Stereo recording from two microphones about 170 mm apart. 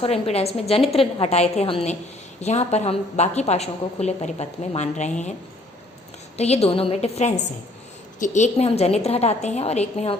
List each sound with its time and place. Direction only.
0.0 s a woman's voice: 35° left (ahead or behind)
6.3 s a woman's voice: 40° left (ahead or behind)